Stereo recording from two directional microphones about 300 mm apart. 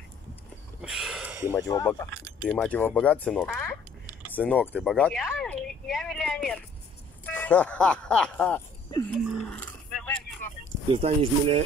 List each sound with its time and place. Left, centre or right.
0.8 s speech: centre
1.5 s speech: centre
9.9 s vehicle: centre
11.0 s speech: centre